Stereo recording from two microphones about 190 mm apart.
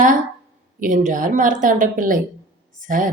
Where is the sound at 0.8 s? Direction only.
40° right (ahead or behind).